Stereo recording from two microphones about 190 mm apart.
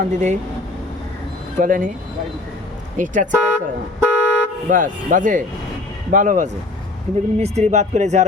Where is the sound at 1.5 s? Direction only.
45° right (ahead or behind).